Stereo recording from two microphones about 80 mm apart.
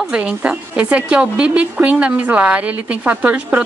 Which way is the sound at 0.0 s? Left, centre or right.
Centre.